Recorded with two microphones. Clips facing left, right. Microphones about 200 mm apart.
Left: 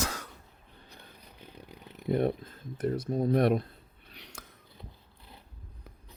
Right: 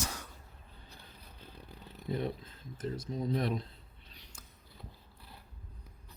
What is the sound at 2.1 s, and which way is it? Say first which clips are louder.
Speech: left 8 dB; 55° left (ahead or behind).